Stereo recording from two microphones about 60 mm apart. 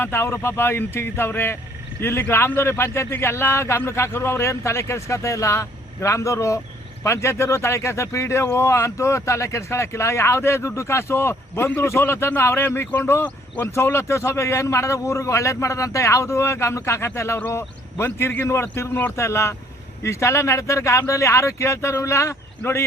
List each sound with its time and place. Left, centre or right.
0.0 s a man's voice: left